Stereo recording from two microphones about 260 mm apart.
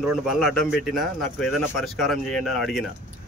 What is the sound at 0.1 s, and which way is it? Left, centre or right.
A man's voice, centre.